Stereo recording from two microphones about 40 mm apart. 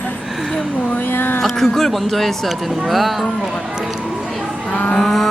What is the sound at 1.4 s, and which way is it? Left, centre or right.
Speech, centre.